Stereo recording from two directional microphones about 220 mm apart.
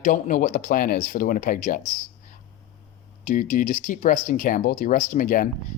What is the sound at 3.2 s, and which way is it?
A man's voice, 35° left (ahead or behind).